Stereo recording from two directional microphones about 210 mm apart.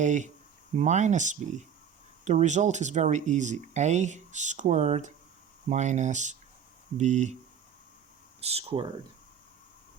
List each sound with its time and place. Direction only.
0.0 s speech: 35° right (ahead or behind)
8.4 s speech: 30° right (ahead or behind)